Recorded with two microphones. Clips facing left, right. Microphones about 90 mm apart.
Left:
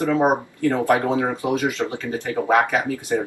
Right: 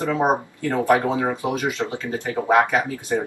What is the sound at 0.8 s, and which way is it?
Speech, 15° right (ahead or behind).